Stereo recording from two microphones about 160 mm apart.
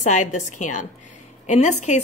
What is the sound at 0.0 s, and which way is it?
A woman's voice, 50° left (ahead or behind).